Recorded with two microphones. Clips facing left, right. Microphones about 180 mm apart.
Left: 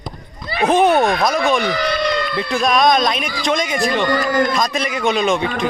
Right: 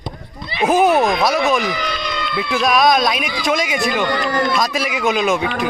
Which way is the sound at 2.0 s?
50° left (ahead or behind).